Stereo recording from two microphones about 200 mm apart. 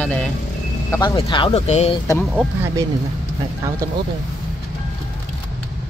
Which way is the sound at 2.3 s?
10° right (ahead or behind).